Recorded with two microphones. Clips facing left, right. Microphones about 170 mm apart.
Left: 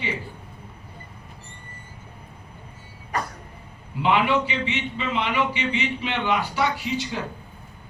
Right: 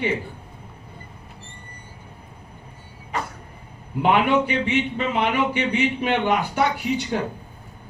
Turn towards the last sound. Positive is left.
turn(degrees=-55)  # may be behind; listen again after turning